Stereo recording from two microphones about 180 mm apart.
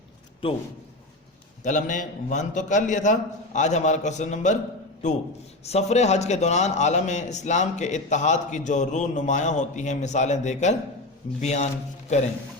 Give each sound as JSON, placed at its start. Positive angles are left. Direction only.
{"t": 1.6, "sound": "a man's voice", "side_deg": 45}
{"t": 5.6, "sound": "a man's voice", "side_deg": 35}